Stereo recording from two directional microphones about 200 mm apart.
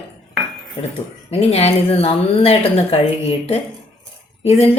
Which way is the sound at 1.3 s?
30° left (ahead or behind).